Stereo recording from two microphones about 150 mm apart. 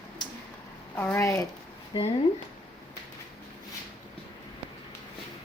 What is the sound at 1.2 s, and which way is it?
Speech, 20° left (ahead or behind).